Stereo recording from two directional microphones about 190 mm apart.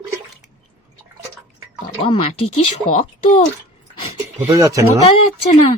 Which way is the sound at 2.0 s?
30° left (ahead or behind).